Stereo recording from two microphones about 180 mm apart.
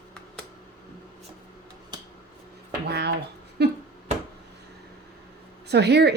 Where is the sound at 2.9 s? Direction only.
65° right (ahead or behind).